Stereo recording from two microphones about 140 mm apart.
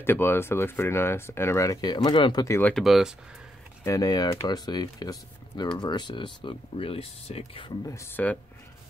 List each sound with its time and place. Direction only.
0.0 s speech: 15° left (ahead or behind); by 2.4 s 35° left (ahead or behind)
2.4 s speech: 20° left (ahead or behind)
2.7 s speech: centre (ahead or behind)
3.8 s speech: 25° left (ahead or behind); by 7.7 s 40° left (ahead or behind)
7.8 s speech: 20° left (ahead or behind)